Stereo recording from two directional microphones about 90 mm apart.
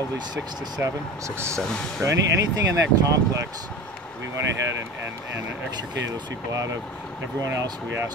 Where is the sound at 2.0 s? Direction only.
40° right (ahead or behind).